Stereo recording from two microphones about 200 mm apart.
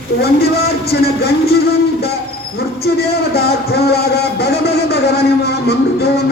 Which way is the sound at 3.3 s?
55° left (ahead or behind).